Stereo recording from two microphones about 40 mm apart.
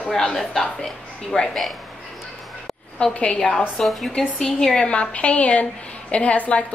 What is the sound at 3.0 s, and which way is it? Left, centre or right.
Speech, left.